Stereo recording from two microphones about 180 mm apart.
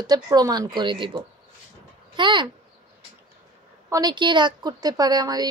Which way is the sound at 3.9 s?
20° right (ahead or behind).